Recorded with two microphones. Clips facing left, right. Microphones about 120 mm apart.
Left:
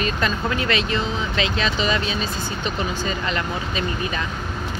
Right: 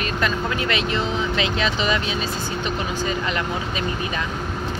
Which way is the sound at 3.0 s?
15° right (ahead or behind).